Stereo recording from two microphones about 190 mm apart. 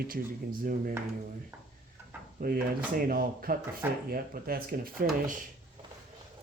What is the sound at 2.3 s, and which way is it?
Speech, 50° right (ahead or behind).